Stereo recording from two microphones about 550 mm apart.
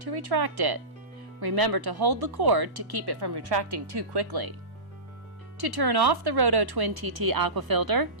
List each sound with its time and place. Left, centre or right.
0.0 s speech: right
5.5 s speech: right